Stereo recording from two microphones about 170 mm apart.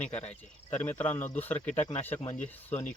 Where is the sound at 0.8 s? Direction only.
10° left (ahead or behind).